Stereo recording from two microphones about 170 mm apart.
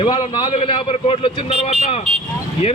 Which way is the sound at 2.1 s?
35° right (ahead or behind).